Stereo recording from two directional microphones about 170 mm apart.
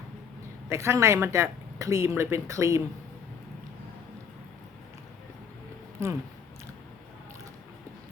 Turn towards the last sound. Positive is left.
turn(degrees=-15)  # may be behind; listen again after turning